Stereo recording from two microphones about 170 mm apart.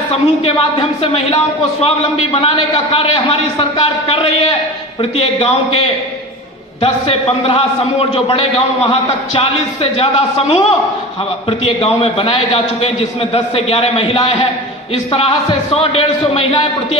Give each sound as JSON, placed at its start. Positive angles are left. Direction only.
{"t": 0.4, "sound": "speech", "side_deg": 35}